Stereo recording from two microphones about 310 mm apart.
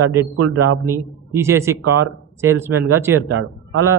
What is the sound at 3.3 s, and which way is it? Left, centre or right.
Speech, right.